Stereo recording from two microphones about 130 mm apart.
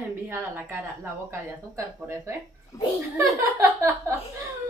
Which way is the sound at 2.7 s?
25° left (ahead or behind).